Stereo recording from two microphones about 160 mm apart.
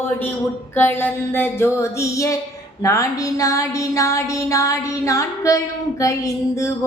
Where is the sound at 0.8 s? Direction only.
15° left (ahead or behind).